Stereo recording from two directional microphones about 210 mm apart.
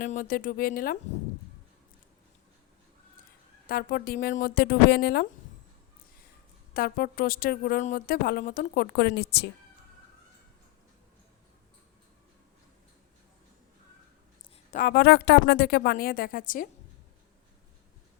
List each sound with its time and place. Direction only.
0.0 s speech: 40° left (ahead or behind)
3.7 s speech: 45° left (ahead or behind)
6.7 s speech: 45° left (ahead or behind)
14.7 s speech: 40° left (ahead or behind)